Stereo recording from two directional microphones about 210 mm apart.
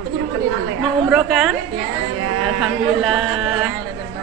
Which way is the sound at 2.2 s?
80° right.